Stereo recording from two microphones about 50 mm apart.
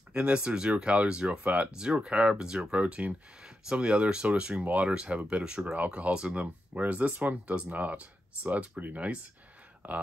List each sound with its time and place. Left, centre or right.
0.1 s speech: right
1.7 s speech: centre